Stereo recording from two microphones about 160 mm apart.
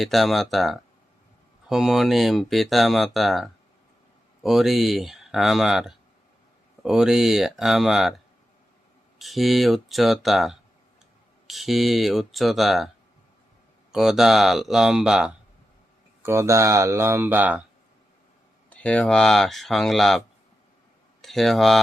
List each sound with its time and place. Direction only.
0.0 s speech: centre (ahead or behind)
9.1 s speech: centre (ahead or behind)
13.9 s speech: centre (ahead or behind)
16.2 s speech: 15° right (ahead or behind)
18.7 s speech: 10° left (ahead or behind)